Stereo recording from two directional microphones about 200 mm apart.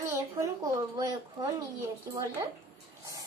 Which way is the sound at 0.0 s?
15° right (ahead or behind).